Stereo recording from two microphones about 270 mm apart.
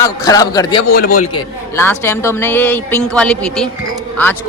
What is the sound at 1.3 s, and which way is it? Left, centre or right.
Speech, centre.